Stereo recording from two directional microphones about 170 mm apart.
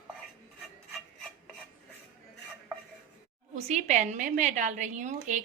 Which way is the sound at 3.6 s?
45° right (ahead or behind).